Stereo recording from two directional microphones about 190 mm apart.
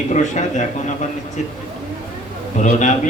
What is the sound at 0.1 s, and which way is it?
Speech, 40° left (ahead or behind).